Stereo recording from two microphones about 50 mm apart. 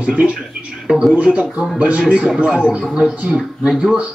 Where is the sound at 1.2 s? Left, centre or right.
Right.